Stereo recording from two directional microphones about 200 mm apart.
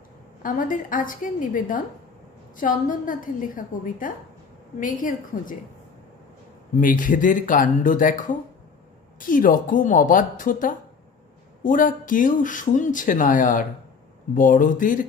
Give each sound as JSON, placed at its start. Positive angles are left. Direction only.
{"t": 0.4, "sound": "a woman's voice", "side_deg": 40}
{"t": 6.8, "sound": "speech", "side_deg": 40}